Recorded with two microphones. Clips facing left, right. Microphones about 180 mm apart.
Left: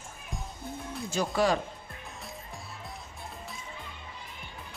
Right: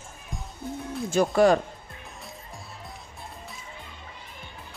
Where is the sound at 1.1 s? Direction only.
50° right (ahead or behind).